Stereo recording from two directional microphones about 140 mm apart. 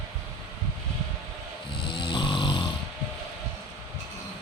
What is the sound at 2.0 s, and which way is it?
Snoring, 35° left (ahead or behind).